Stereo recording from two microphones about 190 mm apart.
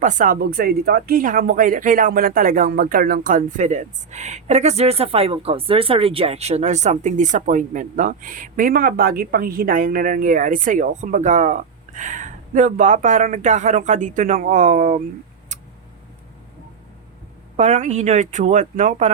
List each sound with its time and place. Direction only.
0.0 s speech: 45° right (ahead or behind)
17.6 s speech: 40° right (ahead or behind)